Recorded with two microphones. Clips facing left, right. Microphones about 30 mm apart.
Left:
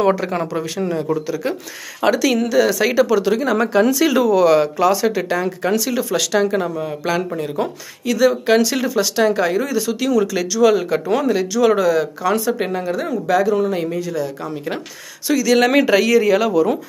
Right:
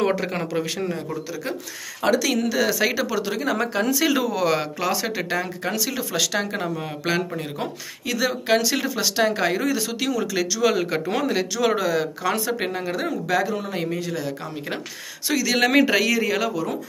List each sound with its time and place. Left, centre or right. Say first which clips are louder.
2.0 s speech: left 4 dB; centre
5.4 s speech: left 7 dB; centre
6.3 s speech: left 7 dB; centre
11.2 s speech: left 6 dB; right
11.6 s speech: left 7 dB; centre
12.0 s speech: left 5 dB; right
12.8 s speech: left 4 dB; right
13.3 s speech: left 9 dB; centre
13.9 s speech: left 5 dB; right
15.2 s speech: left 7 dB; centre
15.6 s speech: left 4 dB; centre